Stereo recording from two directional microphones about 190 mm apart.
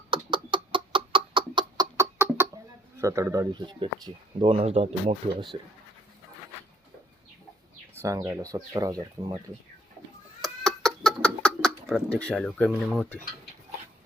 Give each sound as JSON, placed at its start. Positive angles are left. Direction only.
{"t": 0.1, "sound": "chicken", "side_deg": -25}
{"t": 3.0, "sound": "speech", "side_deg": -15}
{"t": 8.0, "sound": "speech", "side_deg": -20}
{"t": 10.4, "sound": "a sound", "side_deg": 0}